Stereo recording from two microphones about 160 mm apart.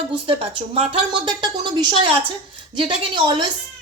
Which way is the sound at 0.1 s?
35° right (ahead or behind).